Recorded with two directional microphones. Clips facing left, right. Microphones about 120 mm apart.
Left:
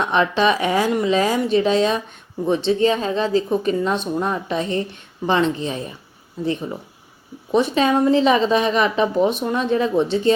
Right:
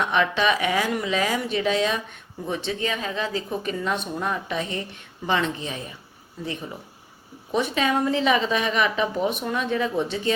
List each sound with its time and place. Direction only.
0.0 s a woman's voice: 30° left (ahead or behind)
7.5 s a woman's voice: 30° left (ahead or behind)